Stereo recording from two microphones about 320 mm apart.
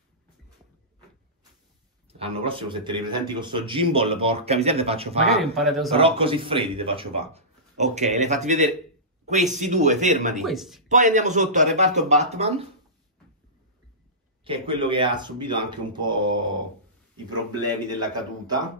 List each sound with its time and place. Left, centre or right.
2.0 s a man's voice: centre
5.4 s a man's voice: centre
5.9 s speech: centre
10.4 s a man's voice: centre
10.9 s speech: right
14.4 s a man's voice: centre
17.6 s a man's voice: centre